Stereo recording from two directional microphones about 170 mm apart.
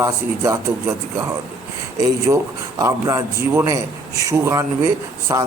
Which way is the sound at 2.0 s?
15° right (ahead or behind).